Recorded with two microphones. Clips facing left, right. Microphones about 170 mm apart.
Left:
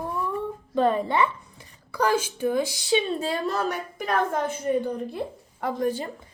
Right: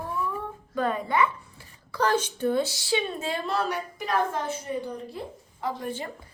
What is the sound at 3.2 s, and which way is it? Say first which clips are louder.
A woman's voice: left 2 dB; 45° left (ahead or behind).